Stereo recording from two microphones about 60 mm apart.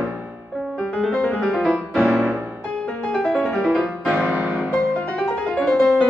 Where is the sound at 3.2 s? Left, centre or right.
Centre.